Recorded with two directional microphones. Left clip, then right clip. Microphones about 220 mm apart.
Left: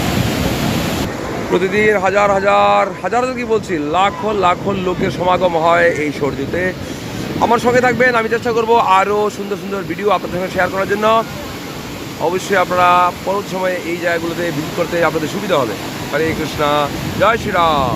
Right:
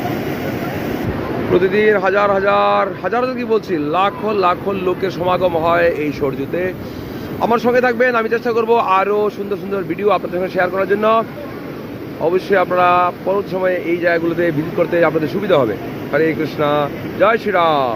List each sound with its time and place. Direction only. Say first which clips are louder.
1.5 s speech: even; 10° left (ahead or behind)